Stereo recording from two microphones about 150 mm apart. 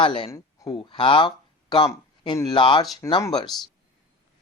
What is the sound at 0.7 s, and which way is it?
Speech, 35° left (ahead or behind).